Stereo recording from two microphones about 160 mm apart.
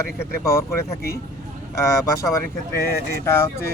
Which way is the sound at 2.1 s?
20° left (ahead or behind).